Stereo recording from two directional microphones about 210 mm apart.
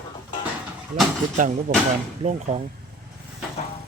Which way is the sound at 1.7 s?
40° right (ahead or behind).